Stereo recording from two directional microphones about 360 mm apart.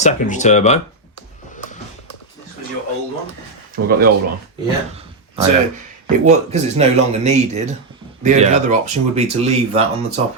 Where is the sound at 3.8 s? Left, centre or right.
Right.